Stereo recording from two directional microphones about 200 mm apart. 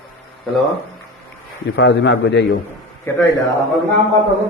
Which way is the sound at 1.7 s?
65° left (ahead or behind).